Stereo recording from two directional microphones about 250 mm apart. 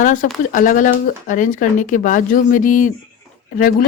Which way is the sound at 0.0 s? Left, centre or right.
Left.